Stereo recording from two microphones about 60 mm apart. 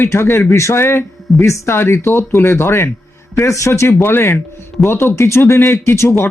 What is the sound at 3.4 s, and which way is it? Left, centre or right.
Speech, left.